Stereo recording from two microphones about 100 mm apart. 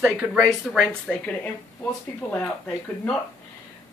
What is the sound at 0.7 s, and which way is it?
Speech, 10° left (ahead or behind).